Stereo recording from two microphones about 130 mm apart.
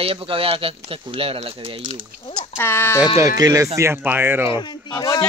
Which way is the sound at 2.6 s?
20° left (ahead or behind).